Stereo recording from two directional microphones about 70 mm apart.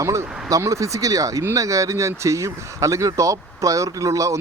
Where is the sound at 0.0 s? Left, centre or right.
Right.